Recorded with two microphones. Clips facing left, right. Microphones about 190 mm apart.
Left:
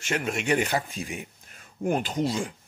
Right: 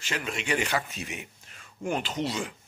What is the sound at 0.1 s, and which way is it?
Speech, 50° left (ahead or behind).